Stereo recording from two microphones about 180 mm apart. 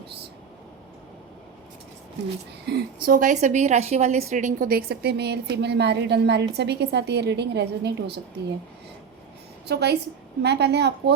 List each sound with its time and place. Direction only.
2.6 s a woman's voice: 60° right (ahead or behind)
9.6 s a woman's voice: 70° right (ahead or behind)